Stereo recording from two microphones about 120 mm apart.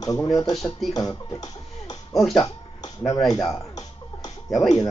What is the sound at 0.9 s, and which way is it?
Speech, 30° left (ahead or behind).